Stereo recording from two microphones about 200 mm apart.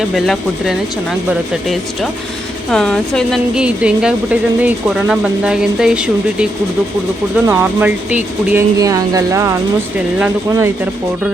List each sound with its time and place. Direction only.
0.3 s speech: centre (ahead or behind)
2.6 s speech: 5° left (ahead or behind)
8.8 s speech: 15° right (ahead or behind)